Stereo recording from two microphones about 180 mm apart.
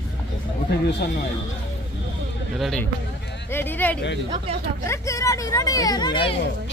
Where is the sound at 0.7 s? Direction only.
65° left (ahead or behind).